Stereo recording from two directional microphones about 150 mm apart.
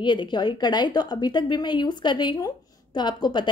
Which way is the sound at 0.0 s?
30° left (ahead or behind).